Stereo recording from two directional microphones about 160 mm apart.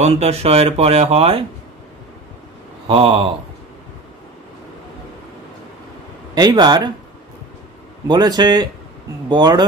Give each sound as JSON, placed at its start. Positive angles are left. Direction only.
{"t": 0.0, "sound": "speech", "side_deg": -40}
{"t": 2.9, "sound": "speech", "side_deg": -35}
{"t": 6.3, "sound": "speech", "side_deg": -25}
{"t": 8.1, "sound": "speech", "side_deg": -25}